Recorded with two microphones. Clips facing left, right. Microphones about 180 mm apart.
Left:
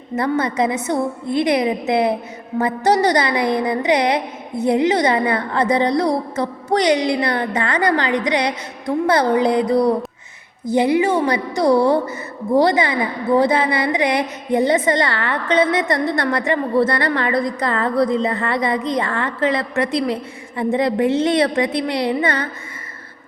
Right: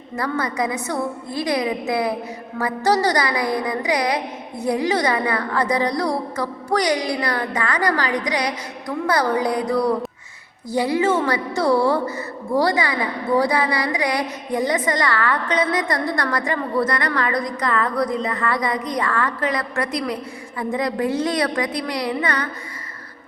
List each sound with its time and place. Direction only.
0.2 s a woman's voice: 25° left (ahead or behind)